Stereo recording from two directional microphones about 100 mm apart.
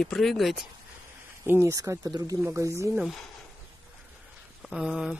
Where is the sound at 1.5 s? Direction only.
30° right (ahead or behind).